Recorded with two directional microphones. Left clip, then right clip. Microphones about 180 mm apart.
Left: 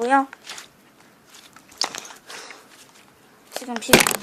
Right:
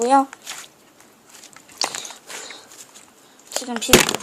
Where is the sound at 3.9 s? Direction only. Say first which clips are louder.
Right 1 dB; 5° left (ahead or behind).